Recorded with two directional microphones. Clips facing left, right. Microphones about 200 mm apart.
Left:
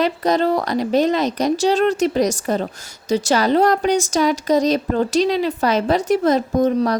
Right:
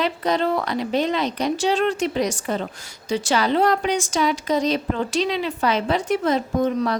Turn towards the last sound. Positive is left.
turn(degrees=40)  # may be behind; listen again after turning